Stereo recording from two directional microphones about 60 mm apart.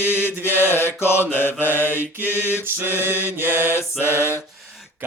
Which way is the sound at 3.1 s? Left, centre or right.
Left.